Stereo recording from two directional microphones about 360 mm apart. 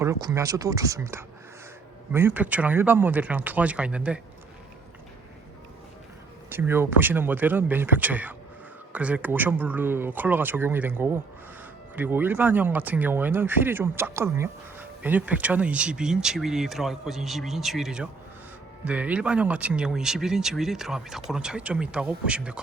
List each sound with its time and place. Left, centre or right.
0.0 s speech: centre
6.5 s speech: centre